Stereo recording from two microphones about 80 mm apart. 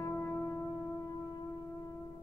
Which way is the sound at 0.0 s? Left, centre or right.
Left.